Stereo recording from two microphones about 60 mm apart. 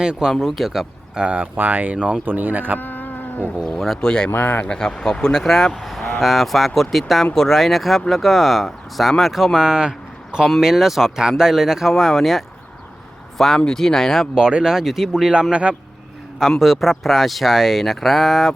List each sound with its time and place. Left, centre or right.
0.0 s speech: centre
0.3 s speech: centre
1.2 s speech: right
2.2 s speech: right
2.7 s cat: left
3.6 s speech: centre
4.0 s speech: centre
4.3 s speech: left
4.7 s speech: centre
9.6 s speech: centre
13.7 s speech: centre
14.3 s speech: centre
16.6 s speech: centre